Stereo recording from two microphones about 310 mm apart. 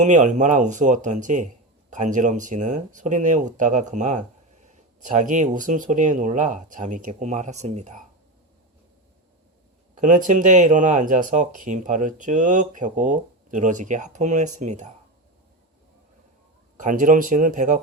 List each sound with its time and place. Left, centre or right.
0.0 s speech: right
9.9 s speech: right
16.8 s speech: right